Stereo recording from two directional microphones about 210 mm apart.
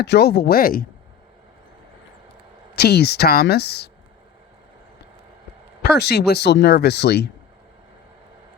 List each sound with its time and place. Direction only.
0.0 s speech: 50° left (ahead or behind)
2.7 s speech: 50° left (ahead or behind)
5.8 s speech: 50° left (ahead or behind)